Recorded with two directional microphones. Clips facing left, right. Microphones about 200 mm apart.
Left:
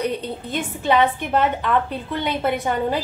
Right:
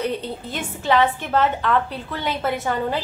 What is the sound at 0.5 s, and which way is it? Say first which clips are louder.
A woman's voice: left 1 dB; 20° left (ahead or behind).